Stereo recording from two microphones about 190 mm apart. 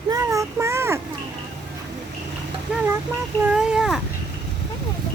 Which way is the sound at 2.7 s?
10° right (ahead or behind).